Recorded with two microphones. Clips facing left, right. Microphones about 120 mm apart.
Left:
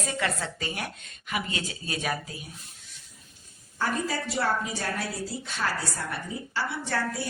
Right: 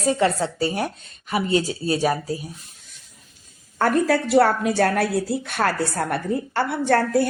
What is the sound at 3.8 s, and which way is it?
A woman's voice, 65° right (ahead or behind).